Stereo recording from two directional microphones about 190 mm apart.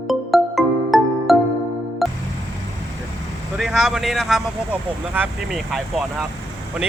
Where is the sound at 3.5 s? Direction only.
Centre (ahead or behind).